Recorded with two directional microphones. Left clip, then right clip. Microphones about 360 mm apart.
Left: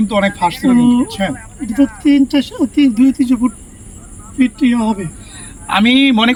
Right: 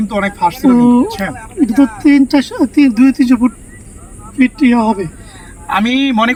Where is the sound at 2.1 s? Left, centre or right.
Centre.